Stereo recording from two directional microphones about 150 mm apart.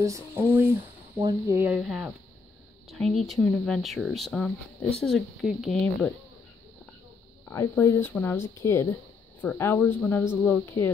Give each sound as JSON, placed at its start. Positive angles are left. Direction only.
{"t": 0.0, "sound": "speech", "side_deg": -20}
{"t": 1.8, "sound": "speech", "side_deg": -5}
{"t": 7.4, "sound": "speech", "side_deg": 20}